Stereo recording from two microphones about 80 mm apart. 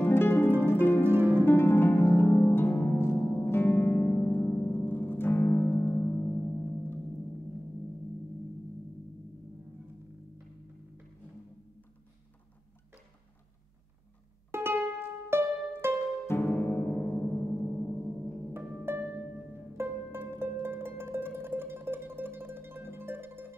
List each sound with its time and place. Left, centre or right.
0.0 s music: left
0.7 s harp: left
1.0 s harp: right
1.4 s harp: left
4.3 s music: left
14.5 s music: right
16.3 s music: left
18.5 s harp: right
19.5 s music: right